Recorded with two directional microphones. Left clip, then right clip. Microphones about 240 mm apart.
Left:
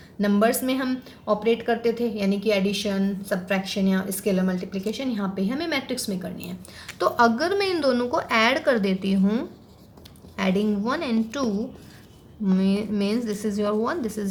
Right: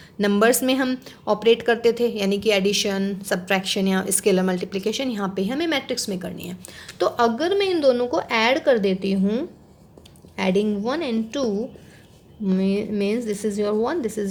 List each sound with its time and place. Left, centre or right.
0.2 s speech: right
7.0 s a woman's voice: right
12.5 s a woman's voice: right